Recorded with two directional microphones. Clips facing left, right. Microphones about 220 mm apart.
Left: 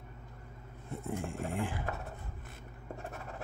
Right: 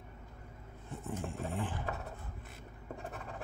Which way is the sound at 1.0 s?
10° left (ahead or behind).